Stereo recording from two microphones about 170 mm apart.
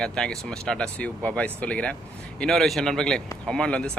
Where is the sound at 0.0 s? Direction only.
5° left (ahead or behind).